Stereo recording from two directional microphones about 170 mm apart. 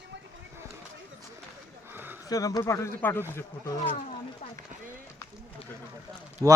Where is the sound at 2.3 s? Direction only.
20° left (ahead or behind).